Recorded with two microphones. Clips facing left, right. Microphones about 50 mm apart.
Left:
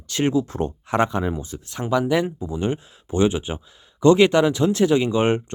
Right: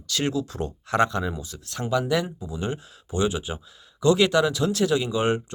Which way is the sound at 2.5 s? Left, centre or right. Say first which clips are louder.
Left 4 dB; left.